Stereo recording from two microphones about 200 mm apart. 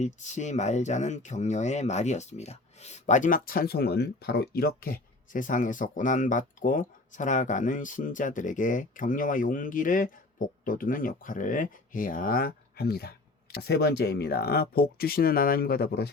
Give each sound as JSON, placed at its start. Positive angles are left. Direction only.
{"t": 0.0, "sound": "speech", "side_deg": 35}